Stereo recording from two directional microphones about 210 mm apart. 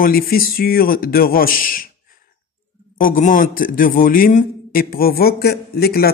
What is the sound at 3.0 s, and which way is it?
A man's voice, 40° left (ahead or behind).